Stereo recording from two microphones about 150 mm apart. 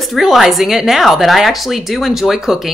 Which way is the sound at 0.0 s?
Centre (ahead or behind).